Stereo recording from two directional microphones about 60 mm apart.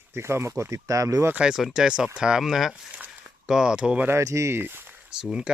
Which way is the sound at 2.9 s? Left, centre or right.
Right.